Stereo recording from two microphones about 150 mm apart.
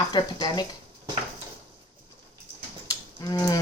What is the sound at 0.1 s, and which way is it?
Speech, 30° left (ahead or behind).